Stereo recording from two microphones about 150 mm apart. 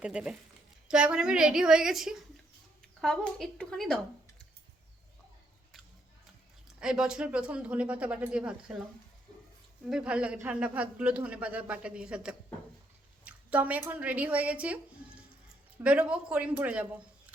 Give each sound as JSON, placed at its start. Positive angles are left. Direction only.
{"t": 0.0, "sound": "a woman's voice", "side_deg": -5}
{"t": 6.7, "sound": "speech", "side_deg": -5}
{"t": 9.8, "sound": "speech", "side_deg": -5}